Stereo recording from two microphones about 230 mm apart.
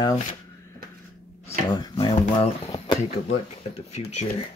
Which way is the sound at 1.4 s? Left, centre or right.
Centre.